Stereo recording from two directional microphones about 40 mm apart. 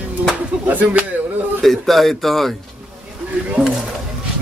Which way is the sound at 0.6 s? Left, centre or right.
Right.